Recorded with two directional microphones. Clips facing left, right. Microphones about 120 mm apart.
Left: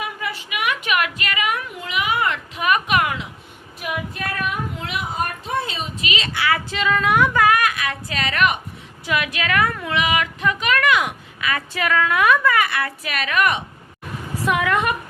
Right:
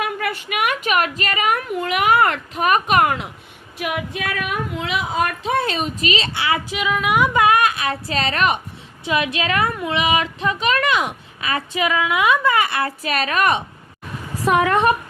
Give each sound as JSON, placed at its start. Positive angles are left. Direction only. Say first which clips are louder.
{"t": 0.0, "sound": "a sound", "louder": "right 5 dB", "side_deg": -60}
{"t": 3.8, "sound": "female singing", "louder": "right 3 dB", "side_deg": -90}
{"t": 6.0, "sound": "a woman's voice", "louder": "right 2 dB", "side_deg": -35}
{"t": 6.7, "sound": "a woman's voice", "louder": "left 1 dB", "side_deg": -10}
{"t": 11.7, "sound": "a woman's voice", "louder": "even", "side_deg": -15}